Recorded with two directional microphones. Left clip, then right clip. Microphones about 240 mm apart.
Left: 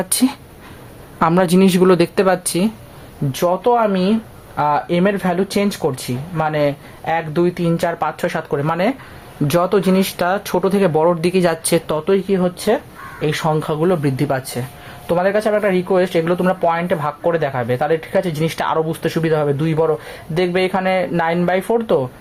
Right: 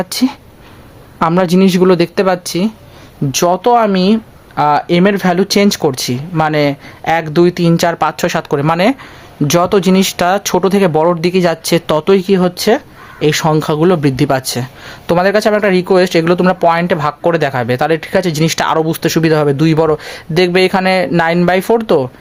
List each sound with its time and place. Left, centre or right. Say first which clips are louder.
0.0 s speech: right 3 dB; centre
3.3 s speech: right 5 dB; right
11.9 s speech: right 6 dB; right